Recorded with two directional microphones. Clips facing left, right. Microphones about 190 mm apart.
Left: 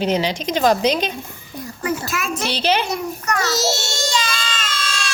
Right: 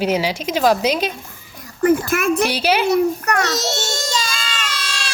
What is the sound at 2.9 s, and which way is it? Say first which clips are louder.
Speech: right 7 dB; 60° right (ahead or behind).